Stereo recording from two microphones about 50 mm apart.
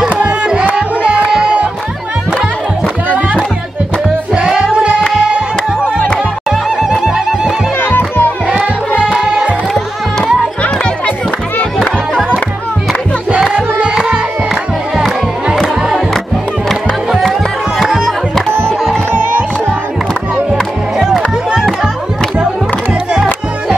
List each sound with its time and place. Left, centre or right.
0.2 s music: right
4.4 s music: centre
6.5 s neigh: centre
7.8 s music: left
13.3 s music: right
13.9 s music: centre
17.2 s music: centre